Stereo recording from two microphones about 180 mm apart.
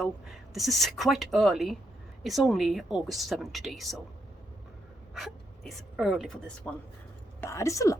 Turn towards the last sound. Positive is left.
turn(degrees=15)  # may be behind; listen again after turning